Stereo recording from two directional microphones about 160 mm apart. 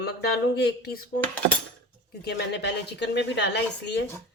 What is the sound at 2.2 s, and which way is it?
A woman's voice, 90° left.